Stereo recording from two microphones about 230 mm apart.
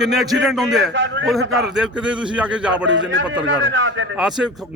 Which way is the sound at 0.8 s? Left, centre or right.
Right.